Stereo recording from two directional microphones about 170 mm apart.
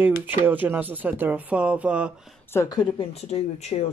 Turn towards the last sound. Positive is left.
turn(degrees=40)  # may be behind; listen again after turning